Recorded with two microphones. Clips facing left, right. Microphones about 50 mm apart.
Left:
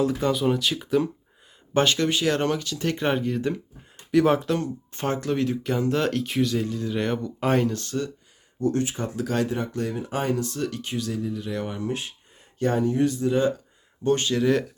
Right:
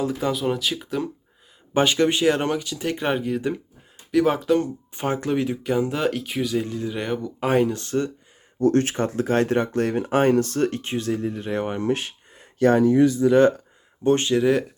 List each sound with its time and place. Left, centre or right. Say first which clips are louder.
0.0 s speech: left 1 dB; centre
1.7 s speech: right 2 dB; centre
8.5 s speech: right 5 dB; right
9.1 s speech: right 4 dB; right
9.5 s speech: right 6 dB; right
11.8 s a sound: right 5 dB; right
13.2 s speech: right 7 dB; right
14.0 s speech: right 3 dB; right